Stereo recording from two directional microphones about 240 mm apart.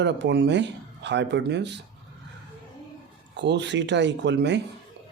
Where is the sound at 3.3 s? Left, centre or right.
Right.